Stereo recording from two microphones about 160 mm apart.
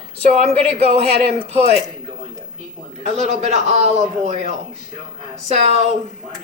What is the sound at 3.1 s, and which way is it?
A man's voice, 45° right (ahead or behind).